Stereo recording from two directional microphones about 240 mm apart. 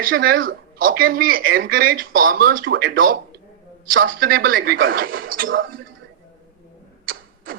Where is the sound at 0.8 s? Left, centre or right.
Right.